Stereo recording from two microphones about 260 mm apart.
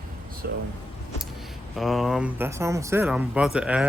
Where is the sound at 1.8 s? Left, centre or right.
Centre.